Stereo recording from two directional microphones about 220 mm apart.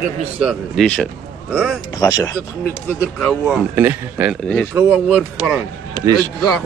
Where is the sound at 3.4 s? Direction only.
5° right (ahead or behind).